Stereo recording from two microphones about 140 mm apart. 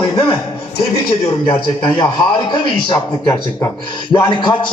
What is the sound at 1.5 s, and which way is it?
A man's voice, 35° left (ahead or behind).